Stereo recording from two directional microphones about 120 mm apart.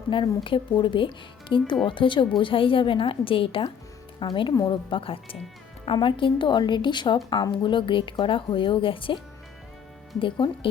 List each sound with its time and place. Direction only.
0.1 s a woman's voice: 45° left (ahead or behind)
10.2 s speech: 45° left (ahead or behind)